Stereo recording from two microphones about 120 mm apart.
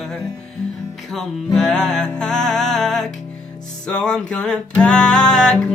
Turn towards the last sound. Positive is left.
turn(degrees=5)  # may be behind; listen again after turning